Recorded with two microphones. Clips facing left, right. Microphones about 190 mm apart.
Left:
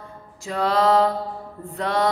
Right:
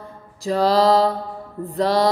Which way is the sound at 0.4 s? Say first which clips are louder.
Right 4 dB; 35° right (ahead or behind).